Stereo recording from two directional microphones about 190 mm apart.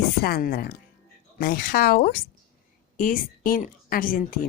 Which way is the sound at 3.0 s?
45° left (ahead or behind).